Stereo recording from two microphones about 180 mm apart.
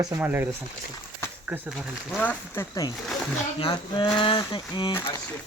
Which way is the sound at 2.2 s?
15° left (ahead or behind).